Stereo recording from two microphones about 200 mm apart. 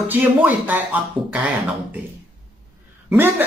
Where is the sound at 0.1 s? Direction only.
10° right (ahead or behind).